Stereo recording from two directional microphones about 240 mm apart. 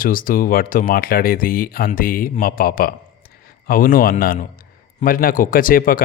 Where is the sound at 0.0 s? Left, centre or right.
Left.